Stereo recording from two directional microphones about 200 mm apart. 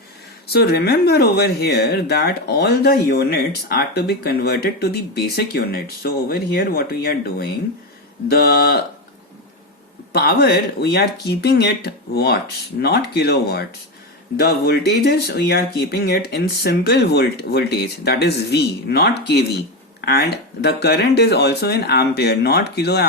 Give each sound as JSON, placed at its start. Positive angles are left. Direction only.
{"t": 0.4, "sound": "speech", "side_deg": 55}
{"t": 10.1, "sound": "speech", "side_deg": 50}